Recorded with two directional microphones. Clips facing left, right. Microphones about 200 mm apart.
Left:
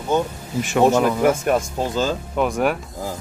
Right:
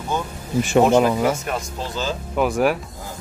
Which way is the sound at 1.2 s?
50° left (ahead or behind).